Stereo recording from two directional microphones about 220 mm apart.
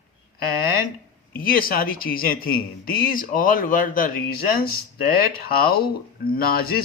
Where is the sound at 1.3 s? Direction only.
40° left (ahead or behind).